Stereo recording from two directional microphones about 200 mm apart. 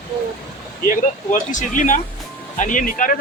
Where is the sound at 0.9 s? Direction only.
40° left (ahead or behind).